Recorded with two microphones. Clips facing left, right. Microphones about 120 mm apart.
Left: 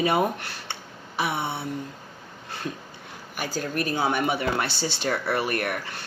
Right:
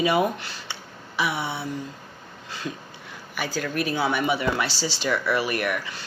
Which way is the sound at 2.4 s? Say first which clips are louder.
Even; 55° left (ahead or behind).